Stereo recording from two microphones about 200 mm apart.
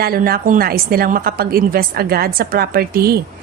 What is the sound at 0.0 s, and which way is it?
A woman's voice, 50° right (ahead or behind).